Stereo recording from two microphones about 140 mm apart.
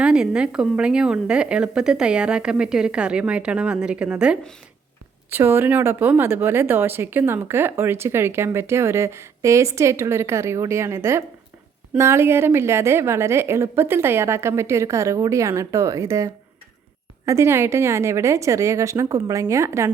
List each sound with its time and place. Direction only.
0.0 s a woman's voice: 5° right (ahead or behind)